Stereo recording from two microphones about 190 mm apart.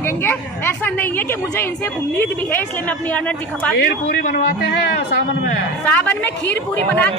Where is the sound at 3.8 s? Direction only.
50° left (ahead or behind).